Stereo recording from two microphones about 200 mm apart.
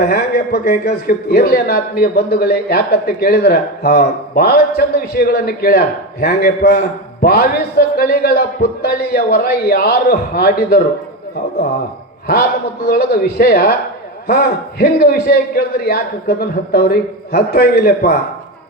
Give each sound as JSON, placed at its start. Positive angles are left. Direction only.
{"t": 0.0, "sound": "a man's voice", "side_deg": 50}
{"t": 12.3, "sound": "a man's voice", "side_deg": 50}